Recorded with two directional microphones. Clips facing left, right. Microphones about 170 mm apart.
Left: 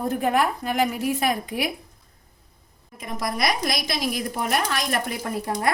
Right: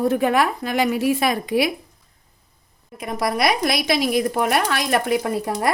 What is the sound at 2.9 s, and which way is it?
A woman's voice, 70° right (ahead or behind).